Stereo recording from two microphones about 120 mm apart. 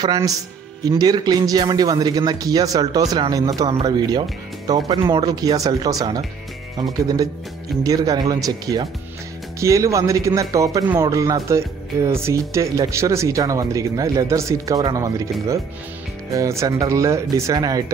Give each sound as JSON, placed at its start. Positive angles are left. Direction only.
{"t": 0.0, "sound": "a man's voice", "side_deg": -35}
{"t": 16.3, "sound": "speech", "side_deg": -25}